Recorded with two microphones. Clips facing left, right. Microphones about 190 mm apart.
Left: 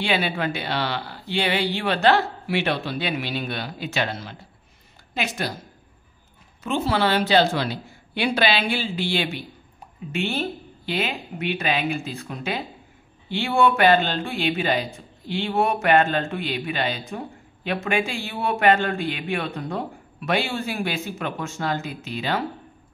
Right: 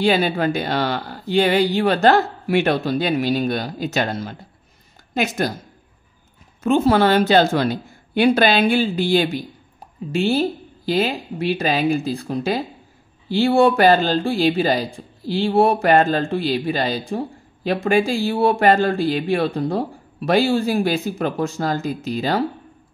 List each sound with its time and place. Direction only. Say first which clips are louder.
0.0 s speech: right 6 dB; 40° right (ahead or behind)
6.6 s speech: right 7 dB; 45° right (ahead or behind)